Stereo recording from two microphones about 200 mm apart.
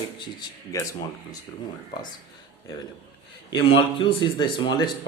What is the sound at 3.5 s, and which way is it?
Speech, 25° left (ahead or behind).